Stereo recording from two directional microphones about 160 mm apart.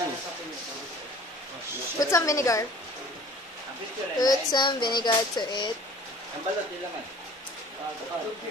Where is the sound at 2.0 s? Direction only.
20° left (ahead or behind).